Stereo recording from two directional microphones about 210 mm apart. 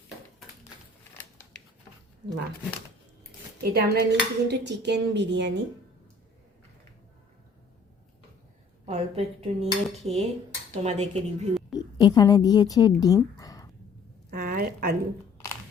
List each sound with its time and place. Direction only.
3.6 s cutlery: 50° right (ahead or behind)
8.9 s dishes: 30° right (ahead or behind)
11.7 s a woman's voice: 20° left (ahead or behind)
14.3 s a sound: 45° right (ahead or behind)